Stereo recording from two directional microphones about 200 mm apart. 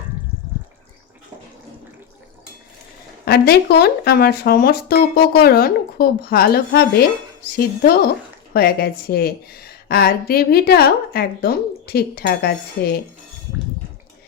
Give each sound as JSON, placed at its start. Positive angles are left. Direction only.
{"t": 3.2, "sound": "a woman's voice", "side_deg": 55}